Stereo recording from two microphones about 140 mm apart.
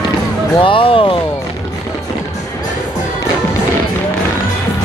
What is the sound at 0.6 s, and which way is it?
Speech, 40° left (ahead or behind).